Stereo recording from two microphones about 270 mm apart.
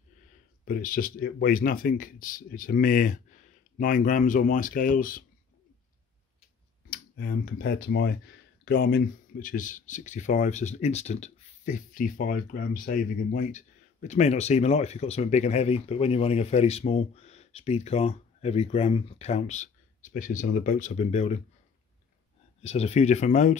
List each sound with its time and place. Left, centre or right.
0.7 s speech: left
6.9 s speech: left
22.6 s speech: left